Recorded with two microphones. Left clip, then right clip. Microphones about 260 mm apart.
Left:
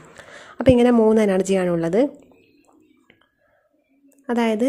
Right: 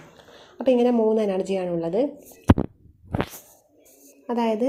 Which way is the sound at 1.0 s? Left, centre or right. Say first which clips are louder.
Left 5 dB; left.